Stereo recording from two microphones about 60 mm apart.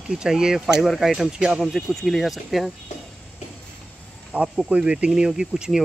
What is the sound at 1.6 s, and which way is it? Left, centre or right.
Speech, centre.